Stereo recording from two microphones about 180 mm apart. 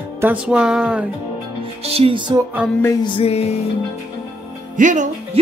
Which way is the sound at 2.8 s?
25° left (ahead or behind).